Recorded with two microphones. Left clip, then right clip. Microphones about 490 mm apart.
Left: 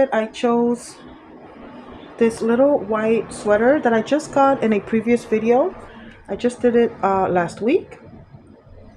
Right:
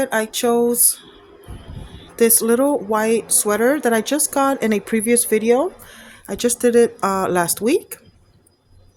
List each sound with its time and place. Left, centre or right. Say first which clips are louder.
0.0 s speech: left 1 dB; right
2.1 s speech: right 1 dB; right